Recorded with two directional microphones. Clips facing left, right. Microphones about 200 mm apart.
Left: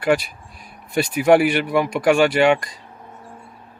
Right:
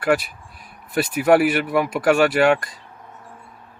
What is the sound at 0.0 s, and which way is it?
Speech, 5° right (ahead or behind).